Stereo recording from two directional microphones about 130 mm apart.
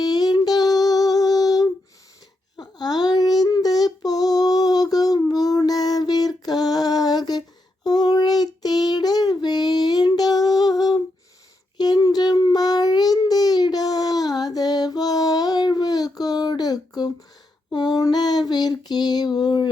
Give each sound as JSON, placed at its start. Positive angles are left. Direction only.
{"t": 0.0, "sound": "music", "side_deg": 30}
{"t": 2.6, "sound": "child singing", "side_deg": 30}
{"t": 17.7, "sound": "female singing", "side_deg": 35}